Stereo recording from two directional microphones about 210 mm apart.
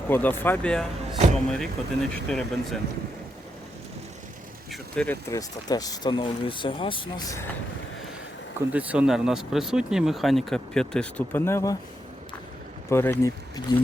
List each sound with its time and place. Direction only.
0.1 s speech: 10° left (ahead or behind)
4.7 s speech: 5° left (ahead or behind); by 7.3 s 25° left (ahead or behind)
8.7 s speech: 5° right (ahead or behind); by 11.8 s 15° left (ahead or behind)
12.9 s speech: 10° left (ahead or behind)